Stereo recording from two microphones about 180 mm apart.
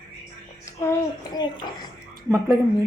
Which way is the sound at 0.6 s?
15° left (ahead or behind).